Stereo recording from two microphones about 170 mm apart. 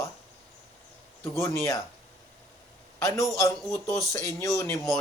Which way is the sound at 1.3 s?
15° left (ahead or behind).